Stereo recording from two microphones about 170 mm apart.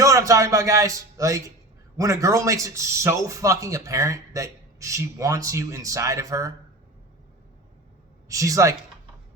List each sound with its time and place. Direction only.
0.0 s a man's voice: 20° right (ahead or behind)
8.3 s speech: 20° right (ahead or behind)